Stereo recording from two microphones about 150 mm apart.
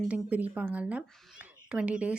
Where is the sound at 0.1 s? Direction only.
10° right (ahead or behind).